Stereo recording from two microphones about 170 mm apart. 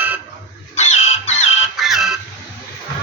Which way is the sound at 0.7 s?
40° left (ahead or behind).